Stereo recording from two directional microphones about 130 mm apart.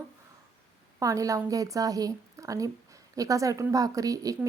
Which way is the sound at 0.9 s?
25° right (ahead or behind).